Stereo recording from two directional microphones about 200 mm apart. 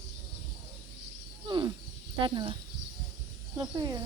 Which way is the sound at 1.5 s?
20° right (ahead or behind).